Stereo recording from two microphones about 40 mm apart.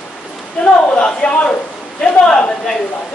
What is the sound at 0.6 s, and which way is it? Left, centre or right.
Speech, left.